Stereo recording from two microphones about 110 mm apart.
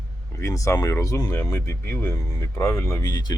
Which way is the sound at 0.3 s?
30° left (ahead or behind).